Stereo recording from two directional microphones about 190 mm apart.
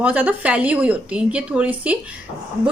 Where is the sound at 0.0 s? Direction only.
10° right (ahead or behind).